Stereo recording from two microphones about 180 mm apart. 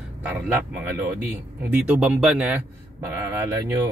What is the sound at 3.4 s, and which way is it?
Speech, 20° right (ahead or behind).